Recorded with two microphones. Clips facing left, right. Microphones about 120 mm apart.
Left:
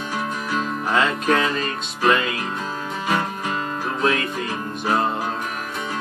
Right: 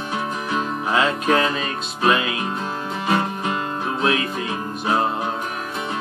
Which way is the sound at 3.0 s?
25° right (ahead or behind).